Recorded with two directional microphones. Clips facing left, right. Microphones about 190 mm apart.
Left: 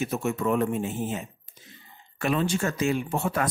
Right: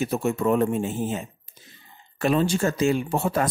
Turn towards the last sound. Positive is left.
turn(degrees=-35)  # may be behind; listen again after turning